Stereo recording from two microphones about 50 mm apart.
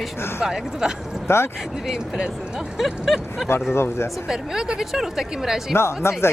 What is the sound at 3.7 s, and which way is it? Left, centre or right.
Speech, left.